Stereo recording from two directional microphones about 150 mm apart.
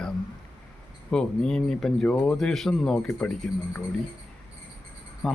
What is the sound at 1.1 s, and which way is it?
Speech, 5° left (ahead or behind).